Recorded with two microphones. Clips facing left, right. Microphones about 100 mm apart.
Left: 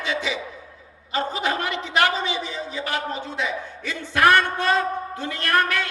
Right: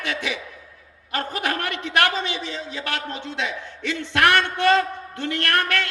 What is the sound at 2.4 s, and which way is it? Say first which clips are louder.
Speech: left 1 dB; 10° left (ahead or behind).